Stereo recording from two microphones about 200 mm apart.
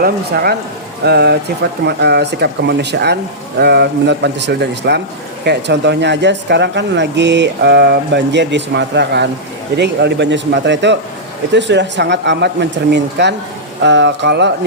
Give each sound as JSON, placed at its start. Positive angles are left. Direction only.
{"t": 0.0, "sound": "speech", "side_deg": -50}